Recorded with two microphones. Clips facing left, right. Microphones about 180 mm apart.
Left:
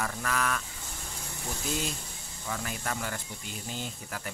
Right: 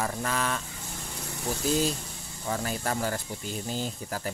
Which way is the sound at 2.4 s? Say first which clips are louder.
Right 5 dB; 35° right (ahead or behind).